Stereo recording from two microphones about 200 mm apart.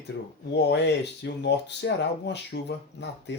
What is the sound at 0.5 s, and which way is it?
Speech, 60° left (ahead or behind).